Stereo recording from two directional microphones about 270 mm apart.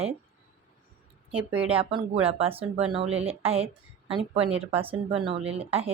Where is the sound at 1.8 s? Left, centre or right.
Centre.